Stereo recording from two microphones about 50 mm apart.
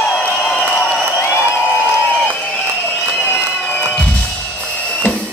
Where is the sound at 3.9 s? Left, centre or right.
Left.